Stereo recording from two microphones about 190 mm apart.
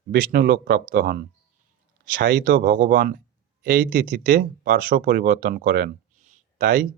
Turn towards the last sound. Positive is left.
turn(degrees=-45)  # may be behind; listen again after turning